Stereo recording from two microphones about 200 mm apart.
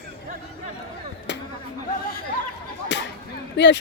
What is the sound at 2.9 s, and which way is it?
Whip, 65° left (ahead or behind).